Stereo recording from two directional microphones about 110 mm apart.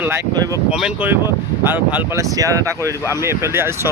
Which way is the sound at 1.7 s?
15° right (ahead or behind).